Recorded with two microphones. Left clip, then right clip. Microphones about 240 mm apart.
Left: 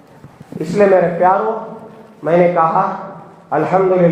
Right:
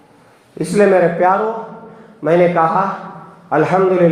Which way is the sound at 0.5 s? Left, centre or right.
Right.